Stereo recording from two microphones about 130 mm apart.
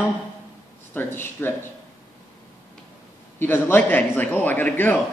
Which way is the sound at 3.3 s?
15° left (ahead or behind).